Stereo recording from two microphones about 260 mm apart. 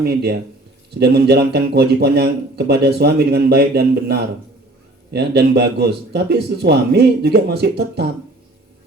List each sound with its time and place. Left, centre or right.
0.0 s a man's voice: right